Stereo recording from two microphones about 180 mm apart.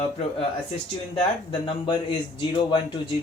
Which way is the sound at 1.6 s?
30° left (ahead or behind).